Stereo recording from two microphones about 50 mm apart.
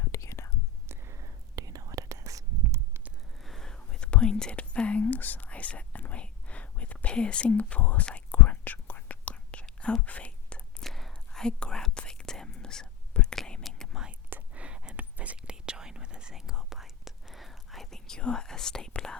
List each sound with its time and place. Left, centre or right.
0.0 s whispering: left
0.9 s a sound: right
2.0 s whispering: right
3.4 s whispering: centre
7.4 s speech: left
8.0 s whispering: left
10.8 s whispering: centre
14.1 s whispering: right
15.4 s whispering: centre